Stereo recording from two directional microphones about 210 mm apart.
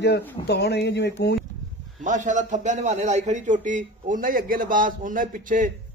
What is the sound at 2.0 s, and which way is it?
A man's voice, 35° right (ahead or behind).